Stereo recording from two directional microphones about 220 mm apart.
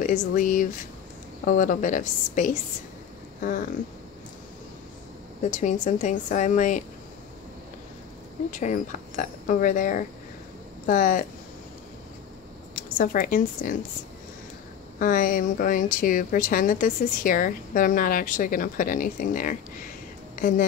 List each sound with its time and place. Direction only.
0.0 s speech: 35° left (ahead or behind)
5.4 s speech: 35° left (ahead or behind)
8.5 s speech: 35° left (ahead or behind)
12.7 s speech: 40° left (ahead or behind)
15.0 s speech: 40° left (ahead or behind)